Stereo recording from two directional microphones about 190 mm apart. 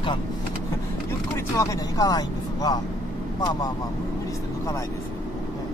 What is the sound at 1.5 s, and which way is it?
Speech, 20° left (ahead or behind).